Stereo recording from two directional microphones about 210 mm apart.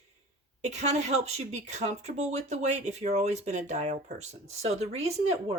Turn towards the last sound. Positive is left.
turn(degrees=-30)  # may be behind; listen again after turning